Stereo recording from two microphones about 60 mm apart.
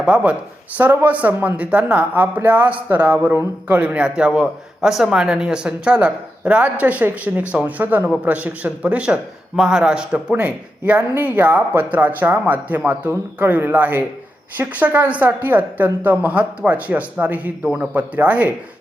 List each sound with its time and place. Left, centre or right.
0.0 s a man's voice: centre